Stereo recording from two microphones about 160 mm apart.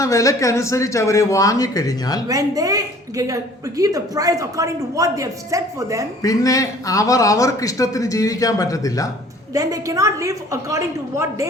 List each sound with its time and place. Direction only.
0.0 s a man's voice: 20° left (ahead or behind)
2.2 s a woman's voice: 20° right (ahead or behind)
6.2 s a man's voice: 20° left (ahead or behind)
9.6 s a woman's voice: 20° right (ahead or behind)